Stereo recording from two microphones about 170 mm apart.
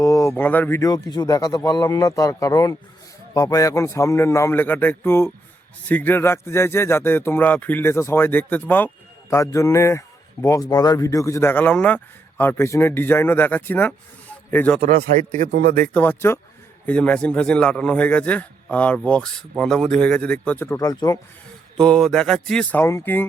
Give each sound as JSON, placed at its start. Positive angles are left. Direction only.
{"t": 0.0, "sound": "a man's voice", "side_deg": 20}
{"t": 14.8, "sound": "a man's voice", "side_deg": -60}
{"t": 15.5, "sound": "speech", "side_deg": -55}
{"t": 15.9, "sound": "a man's voice", "side_deg": 10}
{"t": 21.8, "sound": "speech", "side_deg": 5}